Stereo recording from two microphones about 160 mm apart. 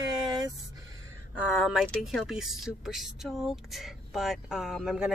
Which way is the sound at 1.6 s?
Centre (ahead or behind).